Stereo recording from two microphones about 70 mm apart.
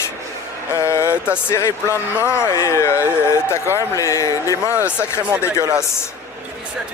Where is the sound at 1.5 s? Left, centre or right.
Left.